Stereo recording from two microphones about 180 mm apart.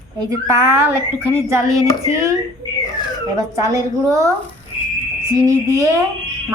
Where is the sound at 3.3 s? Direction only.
20° right (ahead or behind).